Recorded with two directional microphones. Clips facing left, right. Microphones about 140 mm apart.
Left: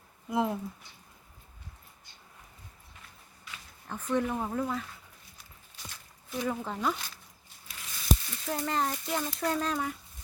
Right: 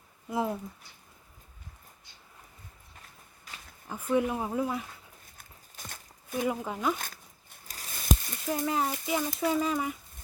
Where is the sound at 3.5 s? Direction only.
40° right (ahead or behind).